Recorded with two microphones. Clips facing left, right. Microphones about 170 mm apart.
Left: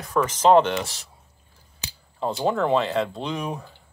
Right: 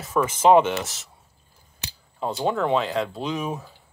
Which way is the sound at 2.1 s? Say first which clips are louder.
Left 1 dB; centre (ahead or behind).